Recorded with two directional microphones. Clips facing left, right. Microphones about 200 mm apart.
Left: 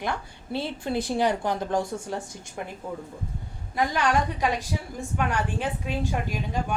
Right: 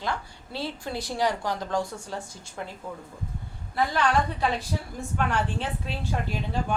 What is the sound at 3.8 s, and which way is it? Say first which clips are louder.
A woman's voice: even; 15° left (ahead or behind).